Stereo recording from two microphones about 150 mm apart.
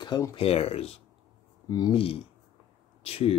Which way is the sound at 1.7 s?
25° left (ahead or behind).